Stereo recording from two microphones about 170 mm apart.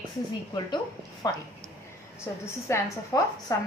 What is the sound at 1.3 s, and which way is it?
A woman's voice, 20° left (ahead or behind).